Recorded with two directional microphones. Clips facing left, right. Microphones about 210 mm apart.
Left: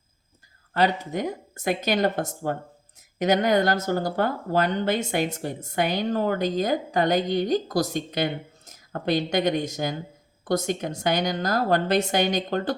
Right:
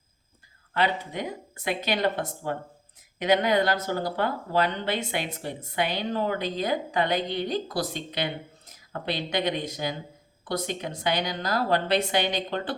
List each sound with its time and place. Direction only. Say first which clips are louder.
0.7 s speech: left 3 dB; 45° left (ahead or behind)